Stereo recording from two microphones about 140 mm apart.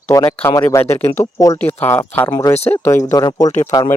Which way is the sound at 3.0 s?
25° left (ahead or behind).